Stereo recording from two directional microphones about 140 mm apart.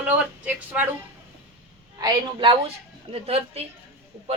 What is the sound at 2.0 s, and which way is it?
A woman's voice, 30° right (ahead or behind).